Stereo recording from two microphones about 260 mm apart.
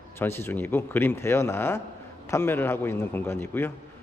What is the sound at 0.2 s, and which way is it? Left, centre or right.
A man's voice, centre.